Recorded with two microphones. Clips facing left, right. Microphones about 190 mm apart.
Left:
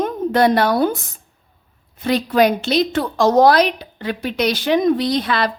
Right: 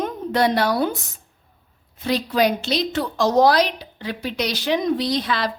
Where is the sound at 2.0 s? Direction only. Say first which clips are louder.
Left 4 dB; 55° left (ahead or behind).